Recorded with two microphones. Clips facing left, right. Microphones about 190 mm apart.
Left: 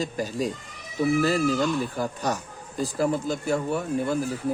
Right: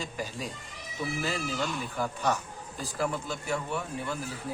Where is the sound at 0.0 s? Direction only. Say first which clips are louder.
Left 9 dB; 40° left (ahead or behind).